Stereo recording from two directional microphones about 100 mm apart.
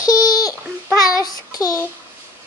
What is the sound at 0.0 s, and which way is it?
Babbling, 40° left (ahead or behind).